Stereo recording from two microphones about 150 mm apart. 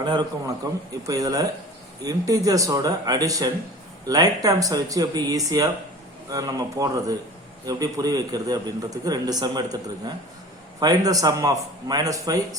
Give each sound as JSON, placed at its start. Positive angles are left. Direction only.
{"t": 0.0, "sound": "a man's voice", "side_deg": -30}
{"t": 10.8, "sound": "a man's voice", "side_deg": -25}